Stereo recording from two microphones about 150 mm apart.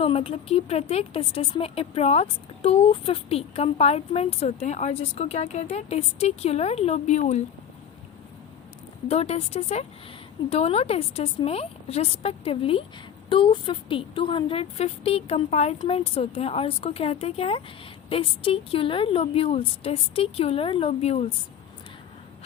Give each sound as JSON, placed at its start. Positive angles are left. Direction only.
{"t": 0.0, "sound": "speech", "side_deg": 40}
{"t": 9.0, "sound": "a woman's voice", "side_deg": 45}